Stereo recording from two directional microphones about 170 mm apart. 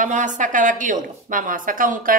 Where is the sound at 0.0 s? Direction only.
50° right (ahead or behind).